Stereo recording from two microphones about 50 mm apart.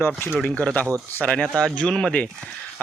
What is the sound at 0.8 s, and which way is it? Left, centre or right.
Speech, left.